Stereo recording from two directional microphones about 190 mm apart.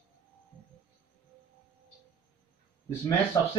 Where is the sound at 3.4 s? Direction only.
15° left (ahead or behind).